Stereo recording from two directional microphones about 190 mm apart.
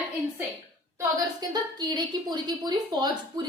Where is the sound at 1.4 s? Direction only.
20° right (ahead or behind).